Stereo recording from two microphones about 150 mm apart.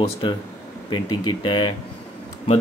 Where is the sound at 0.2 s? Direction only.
35° left (ahead or behind).